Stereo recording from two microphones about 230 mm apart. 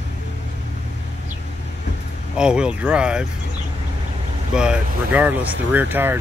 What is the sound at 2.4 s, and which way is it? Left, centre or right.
Speech, centre.